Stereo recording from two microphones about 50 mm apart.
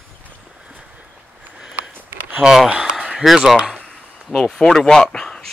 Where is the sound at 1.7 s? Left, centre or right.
Right.